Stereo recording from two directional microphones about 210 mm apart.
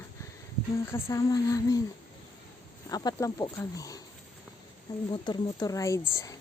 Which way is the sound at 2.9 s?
15° left (ahead or behind).